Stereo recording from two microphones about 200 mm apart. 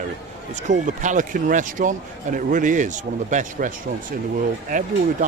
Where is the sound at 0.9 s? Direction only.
40° right (ahead or behind).